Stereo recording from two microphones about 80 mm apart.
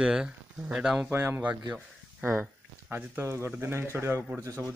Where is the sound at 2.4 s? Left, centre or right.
Right.